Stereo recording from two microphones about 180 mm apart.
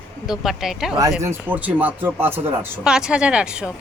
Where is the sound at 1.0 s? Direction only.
15° right (ahead or behind).